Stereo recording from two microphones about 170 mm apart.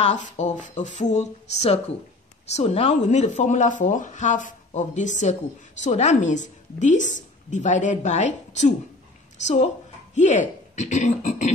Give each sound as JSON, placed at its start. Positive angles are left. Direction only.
{"t": 0.0, "sound": "a woman's voice", "side_deg": 40}